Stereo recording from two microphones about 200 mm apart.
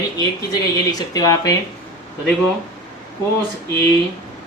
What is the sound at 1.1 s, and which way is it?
Speech, 15° left (ahead or behind).